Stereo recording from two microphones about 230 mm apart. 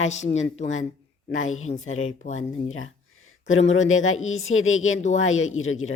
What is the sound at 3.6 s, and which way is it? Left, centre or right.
A man's voice, left.